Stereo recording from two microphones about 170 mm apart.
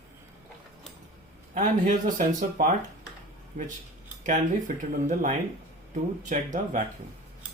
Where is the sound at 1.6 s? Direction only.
55° right (ahead or behind).